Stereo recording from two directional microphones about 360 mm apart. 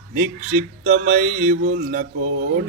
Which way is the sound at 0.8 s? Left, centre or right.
Right.